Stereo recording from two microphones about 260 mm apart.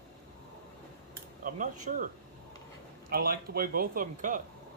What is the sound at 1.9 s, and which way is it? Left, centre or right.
Speech, right.